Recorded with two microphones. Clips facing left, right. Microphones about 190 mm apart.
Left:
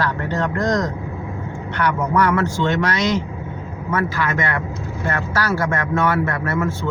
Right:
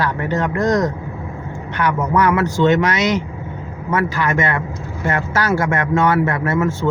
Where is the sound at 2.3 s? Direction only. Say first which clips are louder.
Right 4 dB; 15° right (ahead or behind).